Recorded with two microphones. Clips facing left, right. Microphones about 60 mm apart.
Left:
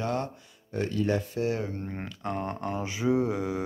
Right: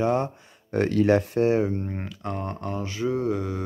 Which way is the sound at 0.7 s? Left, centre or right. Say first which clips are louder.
Right 7 dB; right.